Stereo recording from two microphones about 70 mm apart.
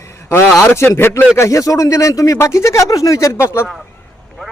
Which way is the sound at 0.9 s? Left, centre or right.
Left.